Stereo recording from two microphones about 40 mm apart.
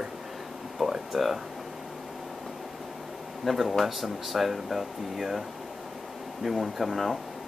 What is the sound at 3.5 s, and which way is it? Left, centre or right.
Speech, centre.